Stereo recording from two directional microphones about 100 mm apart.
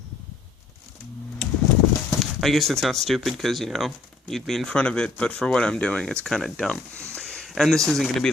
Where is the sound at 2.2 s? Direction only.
Centre (ahead or behind).